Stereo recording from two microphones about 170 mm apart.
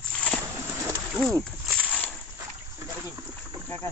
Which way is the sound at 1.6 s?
10° left (ahead or behind).